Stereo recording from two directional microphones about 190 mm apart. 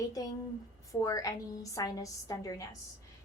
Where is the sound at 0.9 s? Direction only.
15° left (ahead or behind).